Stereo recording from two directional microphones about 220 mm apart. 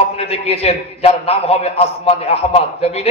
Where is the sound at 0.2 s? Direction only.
25° left (ahead or behind).